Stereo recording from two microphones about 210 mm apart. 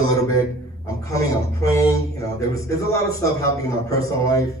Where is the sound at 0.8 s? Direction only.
15° left (ahead or behind).